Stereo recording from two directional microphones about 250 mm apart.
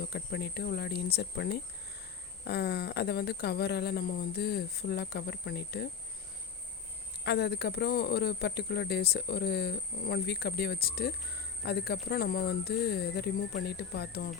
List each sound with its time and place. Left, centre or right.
0.1 s speech: left
7.3 s speech: left